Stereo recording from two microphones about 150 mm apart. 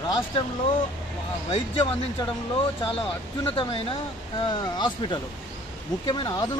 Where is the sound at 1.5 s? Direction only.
35° left (ahead or behind).